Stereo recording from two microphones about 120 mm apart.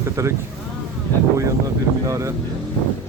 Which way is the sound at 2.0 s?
25° right (ahead or behind).